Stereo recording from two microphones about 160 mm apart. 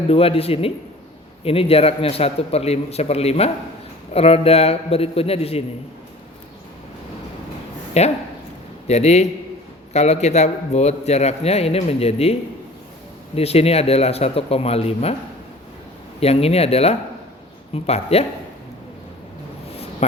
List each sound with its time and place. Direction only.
0.1 s a man's voice: 35° left (ahead or behind)
8.0 s a man's voice: 45° left (ahead or behind)
16.2 s a man's voice: 40° left (ahead or behind)
20.0 s speech: 40° left (ahead or behind)